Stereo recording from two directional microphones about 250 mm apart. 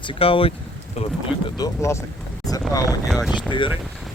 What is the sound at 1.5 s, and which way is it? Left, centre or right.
Speech, centre.